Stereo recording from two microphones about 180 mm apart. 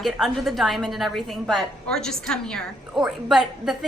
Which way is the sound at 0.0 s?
Centre (ahead or behind).